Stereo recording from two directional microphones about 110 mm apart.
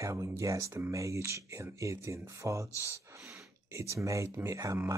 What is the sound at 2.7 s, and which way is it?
Speech, 25° left (ahead or behind).